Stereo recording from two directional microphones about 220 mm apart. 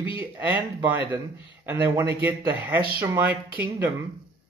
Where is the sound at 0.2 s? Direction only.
10° right (ahead or behind).